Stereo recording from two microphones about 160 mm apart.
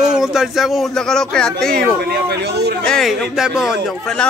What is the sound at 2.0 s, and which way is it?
Speech, 85° right.